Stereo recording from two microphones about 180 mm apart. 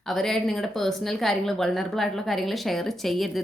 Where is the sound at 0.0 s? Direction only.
Centre (ahead or behind).